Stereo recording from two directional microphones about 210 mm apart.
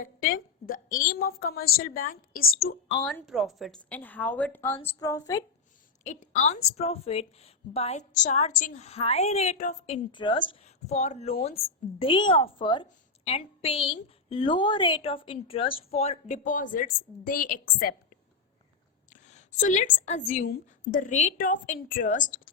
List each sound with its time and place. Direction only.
0.0 s a woman's voice: 40° left (ahead or behind)
3.0 s a woman's voice: centre (ahead or behind); by 5.5 s 15° left (ahead or behind)
6.0 s a woman's voice: 35° left (ahead or behind)
19.1 s a woman's voice: 35° left (ahead or behind)